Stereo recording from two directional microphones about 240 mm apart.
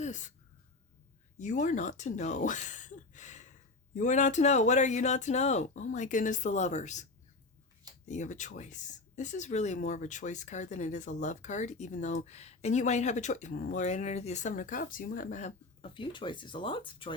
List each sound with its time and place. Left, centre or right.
0.0 s speech: left
1.4 s speech: left